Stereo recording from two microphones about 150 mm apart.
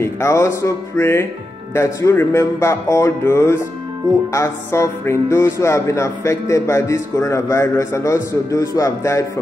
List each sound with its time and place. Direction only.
0.0 s music: 20° left (ahead or behind)